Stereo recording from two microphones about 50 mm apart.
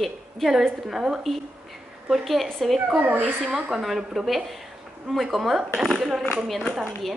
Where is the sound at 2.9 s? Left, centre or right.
Right.